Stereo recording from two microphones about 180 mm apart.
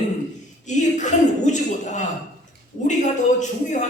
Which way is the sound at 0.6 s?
40° left (ahead or behind).